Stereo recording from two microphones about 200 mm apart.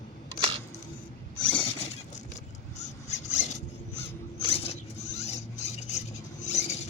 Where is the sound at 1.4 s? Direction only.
25° left (ahead or behind).